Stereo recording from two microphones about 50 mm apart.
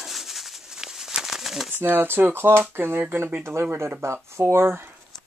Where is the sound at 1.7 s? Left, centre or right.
Right.